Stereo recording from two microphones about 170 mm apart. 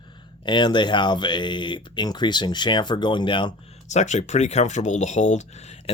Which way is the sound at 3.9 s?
45° left (ahead or behind).